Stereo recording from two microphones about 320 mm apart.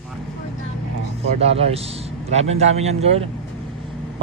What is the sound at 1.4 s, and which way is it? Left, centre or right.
Speech, centre.